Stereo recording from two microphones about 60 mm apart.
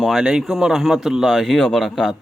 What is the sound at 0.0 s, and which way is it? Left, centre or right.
A man's voice, centre.